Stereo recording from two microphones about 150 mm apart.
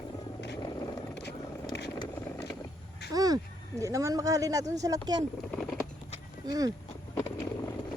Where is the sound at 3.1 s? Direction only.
25° right (ahead or behind).